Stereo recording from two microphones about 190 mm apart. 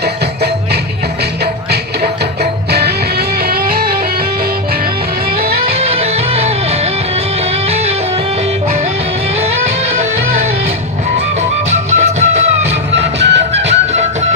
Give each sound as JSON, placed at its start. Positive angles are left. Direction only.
{"t": 0.0, "sound": "music", "side_deg": -60}
{"t": 2.4, "sound": "music", "side_deg": -60}
{"t": 6.0, "sound": "music", "side_deg": -35}
{"t": 11.7, "sound": "music", "side_deg": -35}
{"t": 13.0, "sound": "music", "side_deg": -65}
{"t": 13.5, "sound": "music", "side_deg": -35}